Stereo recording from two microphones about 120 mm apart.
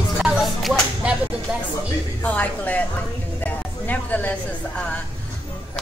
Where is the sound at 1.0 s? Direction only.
10° right (ahead or behind).